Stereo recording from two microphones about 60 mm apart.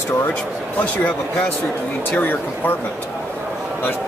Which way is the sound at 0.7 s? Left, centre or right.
Left.